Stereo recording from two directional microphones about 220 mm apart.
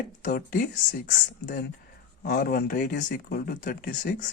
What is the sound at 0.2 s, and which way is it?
Speech, 35° left (ahead or behind).